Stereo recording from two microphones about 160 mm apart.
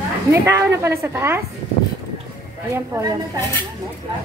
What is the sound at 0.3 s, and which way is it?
A woman's voice, 20° right (ahead or behind).